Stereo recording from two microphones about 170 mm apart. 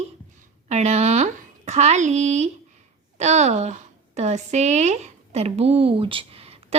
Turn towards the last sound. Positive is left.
turn(degrees=-35)  # may be behind; listen again after turning